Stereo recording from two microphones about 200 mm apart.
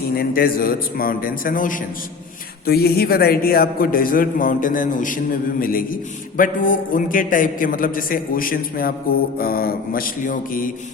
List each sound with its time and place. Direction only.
0.2 s a man's voice: 45° left (ahead or behind)